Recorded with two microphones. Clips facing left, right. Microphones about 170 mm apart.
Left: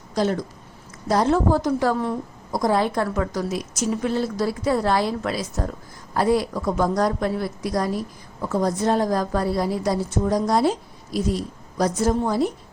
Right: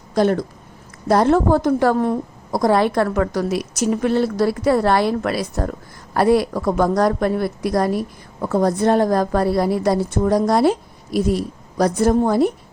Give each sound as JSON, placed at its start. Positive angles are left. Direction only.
{"t": 0.1, "sound": "a woman's voice", "side_deg": -55}